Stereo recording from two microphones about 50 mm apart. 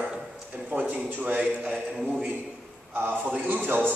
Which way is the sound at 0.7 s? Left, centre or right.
Right.